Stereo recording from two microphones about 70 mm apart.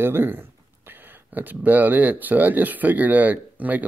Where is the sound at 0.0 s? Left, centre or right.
Right.